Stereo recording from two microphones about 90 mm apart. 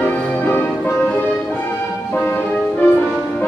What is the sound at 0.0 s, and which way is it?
Music, 15° left (ahead or behind).